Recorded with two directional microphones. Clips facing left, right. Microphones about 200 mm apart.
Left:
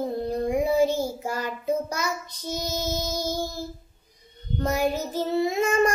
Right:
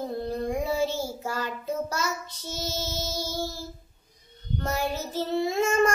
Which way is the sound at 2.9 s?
15° left (ahead or behind).